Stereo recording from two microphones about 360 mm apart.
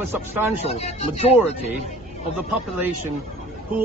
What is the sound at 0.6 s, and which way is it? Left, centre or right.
Speech, centre.